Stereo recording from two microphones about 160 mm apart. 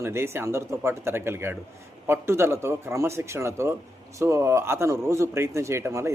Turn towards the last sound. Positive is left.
turn(degrees=-15)  # may be behind; listen again after turning